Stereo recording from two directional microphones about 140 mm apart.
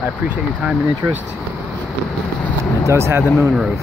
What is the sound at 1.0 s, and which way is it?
Speech, 20° right (ahead or behind).